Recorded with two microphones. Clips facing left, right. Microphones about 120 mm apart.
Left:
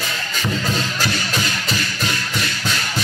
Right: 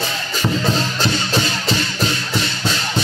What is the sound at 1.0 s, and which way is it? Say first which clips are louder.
Music: right 3 dB; 30° right (ahead or behind).